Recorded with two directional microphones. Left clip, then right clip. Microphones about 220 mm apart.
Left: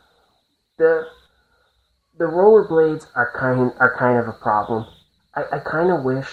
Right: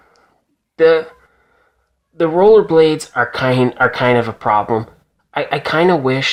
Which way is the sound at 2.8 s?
30° right (ahead or behind).